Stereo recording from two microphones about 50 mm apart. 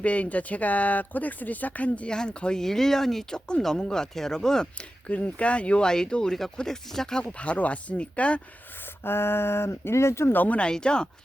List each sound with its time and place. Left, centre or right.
0.0 s speech: left
2.0 s speech: centre
5.0 s speech: left
7.3 s speech: left
9.0 s speech: left
10.3 s speech: left
10.6 s speech: centre